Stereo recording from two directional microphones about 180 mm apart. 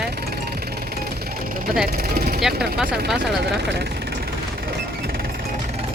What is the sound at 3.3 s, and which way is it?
Speech, 65° right (ahead or behind).